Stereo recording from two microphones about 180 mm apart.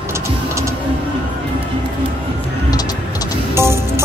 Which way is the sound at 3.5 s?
15° right (ahead or behind).